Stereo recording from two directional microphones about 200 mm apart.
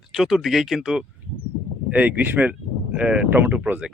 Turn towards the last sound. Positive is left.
turn(degrees=-5)  # may be behind; listen again after turning